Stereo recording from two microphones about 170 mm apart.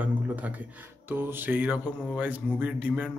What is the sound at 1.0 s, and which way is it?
A man's voice, 10° right (ahead or behind).